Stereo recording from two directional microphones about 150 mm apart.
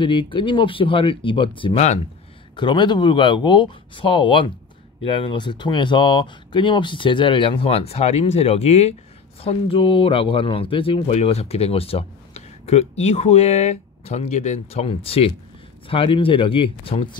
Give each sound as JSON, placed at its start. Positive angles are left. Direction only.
{"t": 0.0, "sound": "a man's voice", "side_deg": 35}